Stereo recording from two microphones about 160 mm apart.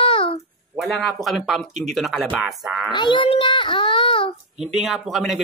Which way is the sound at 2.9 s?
30° left (ahead or behind).